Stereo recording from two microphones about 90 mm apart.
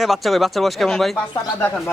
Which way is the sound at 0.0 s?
Centre (ahead or behind).